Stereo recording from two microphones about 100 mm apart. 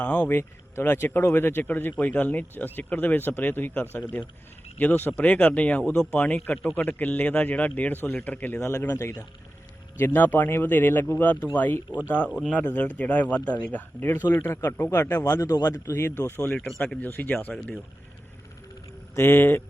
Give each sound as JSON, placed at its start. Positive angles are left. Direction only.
{"t": 0.0, "sound": "a man's voice", "side_deg": 15}
{"t": 10.0, "sound": "a man's voice", "side_deg": 20}
{"t": 16.6, "sound": "speech", "side_deg": 5}
{"t": 17.0, "sound": "a man's voice", "side_deg": 15}
{"t": 19.1, "sound": "speech", "side_deg": 25}